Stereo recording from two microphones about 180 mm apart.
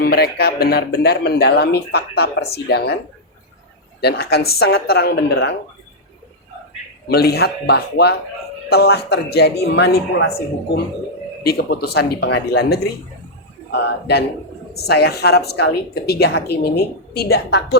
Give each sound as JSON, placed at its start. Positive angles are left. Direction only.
{"t": 0.0, "sound": "speech", "side_deg": 60}
{"t": 4.0, "sound": "speech", "side_deg": 60}
{"t": 7.1, "sound": "speech", "side_deg": 60}
{"t": 11.4, "sound": "speech", "side_deg": 60}
{"t": 13.7, "sound": "a man's voice", "side_deg": 75}